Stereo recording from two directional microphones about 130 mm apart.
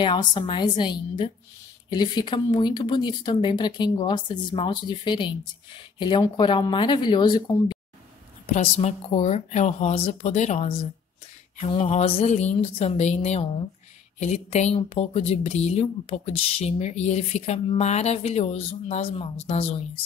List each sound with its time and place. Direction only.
0.0 s speech: 40° left (ahead or behind)
8.5 s speech: 55° left (ahead or behind)
11.6 s speech: 45° left (ahead or behind)